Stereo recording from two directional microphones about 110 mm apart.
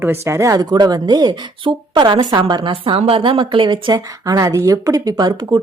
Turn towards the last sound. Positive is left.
turn(degrees=-35)  # may be behind; listen again after turning